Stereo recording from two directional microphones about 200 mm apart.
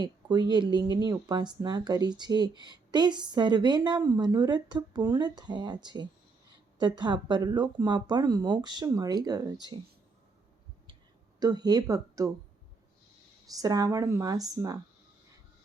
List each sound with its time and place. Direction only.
0.0 s speech: 20° right (ahead or behind)
11.3 s speech: 20° right (ahead or behind)
13.5 s speech: 20° right (ahead or behind)